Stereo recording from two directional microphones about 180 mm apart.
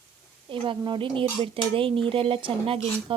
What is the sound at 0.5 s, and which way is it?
Speech, 30° right (ahead or behind).